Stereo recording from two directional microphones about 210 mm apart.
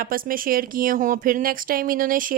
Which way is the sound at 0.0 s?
45° right (ahead or behind).